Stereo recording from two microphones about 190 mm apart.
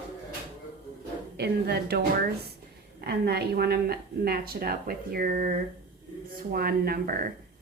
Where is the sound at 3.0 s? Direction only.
55° right (ahead or behind).